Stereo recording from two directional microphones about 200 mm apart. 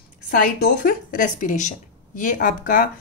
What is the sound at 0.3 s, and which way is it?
A woman's voice, 45° left (ahead or behind).